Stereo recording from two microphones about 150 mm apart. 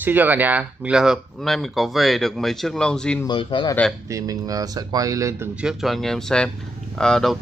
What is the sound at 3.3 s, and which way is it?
Speech, 35° left (ahead or behind).